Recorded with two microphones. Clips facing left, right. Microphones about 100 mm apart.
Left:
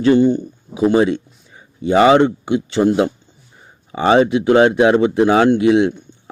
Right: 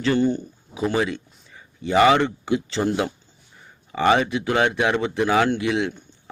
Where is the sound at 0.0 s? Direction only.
20° left (ahead or behind).